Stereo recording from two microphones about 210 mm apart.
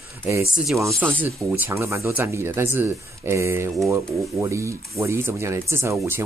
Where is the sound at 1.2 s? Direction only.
10° right (ahead or behind).